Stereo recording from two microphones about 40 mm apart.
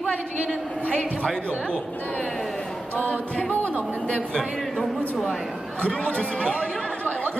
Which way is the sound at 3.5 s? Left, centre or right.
Left.